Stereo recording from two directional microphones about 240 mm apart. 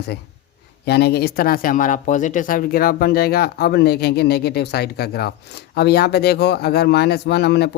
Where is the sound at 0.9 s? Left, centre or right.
Left.